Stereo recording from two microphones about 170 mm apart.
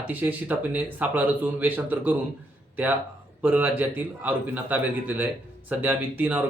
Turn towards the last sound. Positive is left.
turn(degrees=-10)  # may be behind; listen again after turning